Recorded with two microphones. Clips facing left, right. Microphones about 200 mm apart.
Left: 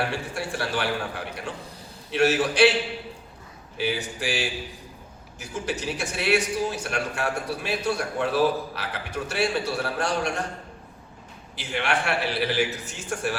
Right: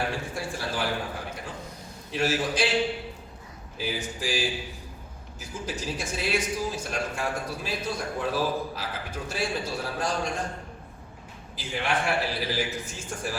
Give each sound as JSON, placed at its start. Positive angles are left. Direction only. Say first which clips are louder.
{"t": 0.1, "sound": "a man's voice", "louder": "left 2 dB", "side_deg": 70}
{"t": 3.8, "sound": "a man's voice", "louder": "left 4 dB", "side_deg": 70}
{"t": 11.5, "sound": "a man's voice", "louder": "left 2 dB", "side_deg": 70}